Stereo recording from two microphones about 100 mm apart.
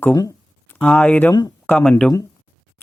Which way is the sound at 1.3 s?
40° left (ahead or behind).